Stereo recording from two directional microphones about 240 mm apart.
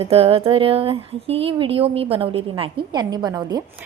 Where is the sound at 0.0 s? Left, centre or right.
Right.